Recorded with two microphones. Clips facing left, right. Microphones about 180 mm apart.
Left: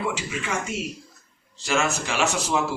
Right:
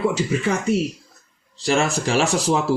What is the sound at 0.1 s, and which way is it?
Speech, 40° right (ahead or behind).